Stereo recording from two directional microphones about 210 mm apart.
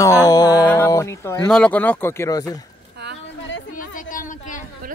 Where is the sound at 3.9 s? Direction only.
40° left (ahead or behind).